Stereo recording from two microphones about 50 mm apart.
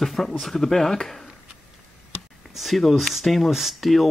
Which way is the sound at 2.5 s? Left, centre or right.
Centre.